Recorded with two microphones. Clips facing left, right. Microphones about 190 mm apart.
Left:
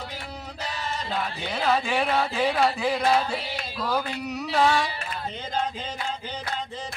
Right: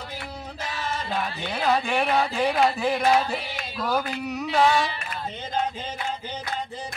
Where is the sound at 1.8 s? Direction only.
Centre (ahead or behind).